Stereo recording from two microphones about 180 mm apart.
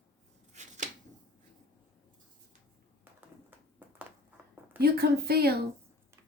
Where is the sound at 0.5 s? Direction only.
40° right (ahead or behind).